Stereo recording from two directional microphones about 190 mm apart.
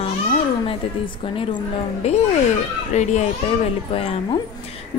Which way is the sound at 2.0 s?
35° left (ahead or behind).